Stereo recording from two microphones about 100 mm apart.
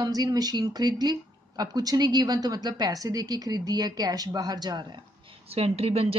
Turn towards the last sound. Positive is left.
turn(degrees=-80)